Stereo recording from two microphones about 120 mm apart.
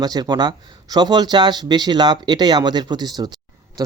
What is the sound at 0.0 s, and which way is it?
A man's voice, 35° right (ahead or behind).